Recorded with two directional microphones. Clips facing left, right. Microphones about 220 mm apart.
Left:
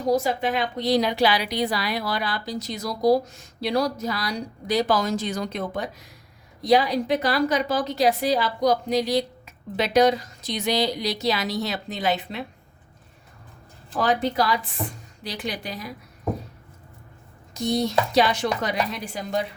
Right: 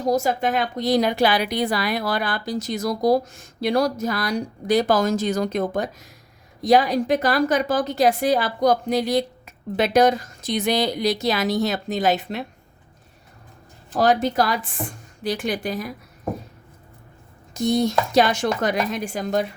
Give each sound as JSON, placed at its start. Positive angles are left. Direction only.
{"t": 0.0, "sound": "a woman's voice", "side_deg": -45}
{"t": 13.9, "sound": "a woman's voice", "side_deg": -40}
{"t": 17.5, "sound": "a woman's voice", "side_deg": -50}